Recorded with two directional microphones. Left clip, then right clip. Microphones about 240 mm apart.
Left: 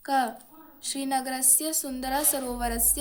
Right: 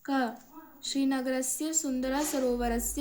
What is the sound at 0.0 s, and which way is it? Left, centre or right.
A woman's voice, left.